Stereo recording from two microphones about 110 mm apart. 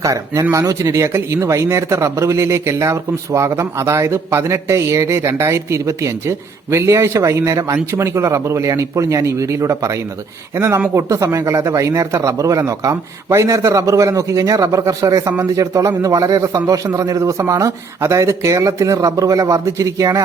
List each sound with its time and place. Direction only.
0.0 s a man's voice: 30° right (ahead or behind)